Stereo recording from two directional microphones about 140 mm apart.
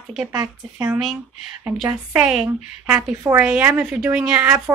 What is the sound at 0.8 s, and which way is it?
A woman's voice, 5° right (ahead or behind).